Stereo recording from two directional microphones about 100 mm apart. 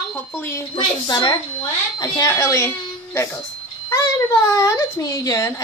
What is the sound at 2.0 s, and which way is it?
Speech, 35° left (ahead or behind).